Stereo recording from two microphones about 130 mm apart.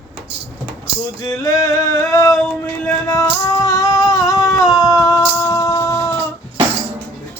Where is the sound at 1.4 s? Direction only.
25° left (ahead or behind).